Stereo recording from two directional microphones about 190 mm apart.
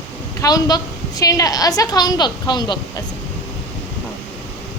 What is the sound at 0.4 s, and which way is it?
A woman's voice, 20° left (ahead or behind).